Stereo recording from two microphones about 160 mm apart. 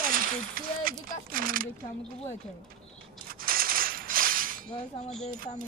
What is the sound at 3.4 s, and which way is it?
Mechanisms, 65° right (ahead or behind).